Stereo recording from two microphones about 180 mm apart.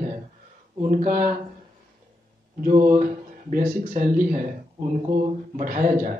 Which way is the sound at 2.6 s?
45° right (ahead or behind).